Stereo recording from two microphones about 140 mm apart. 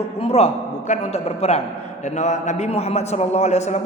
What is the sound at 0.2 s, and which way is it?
A man's voice, 45° left (ahead or behind).